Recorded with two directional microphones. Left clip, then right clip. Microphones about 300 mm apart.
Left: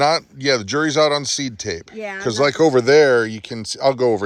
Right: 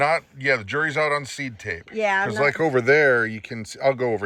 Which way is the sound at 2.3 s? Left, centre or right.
Centre.